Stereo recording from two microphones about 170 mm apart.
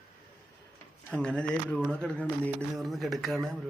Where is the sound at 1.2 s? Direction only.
5° left (ahead or behind).